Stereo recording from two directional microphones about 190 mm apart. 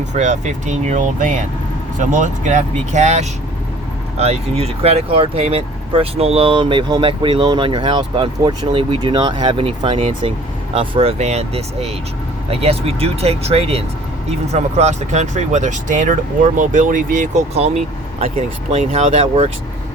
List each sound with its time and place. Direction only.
0.1 s speech: 40° right (ahead or behind)